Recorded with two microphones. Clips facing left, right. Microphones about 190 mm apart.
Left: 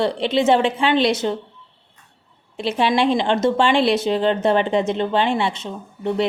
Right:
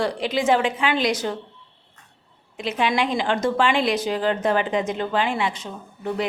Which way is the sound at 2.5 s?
30° left (ahead or behind).